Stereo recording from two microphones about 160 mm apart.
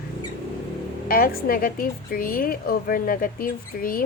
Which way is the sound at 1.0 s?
65° left (ahead or behind).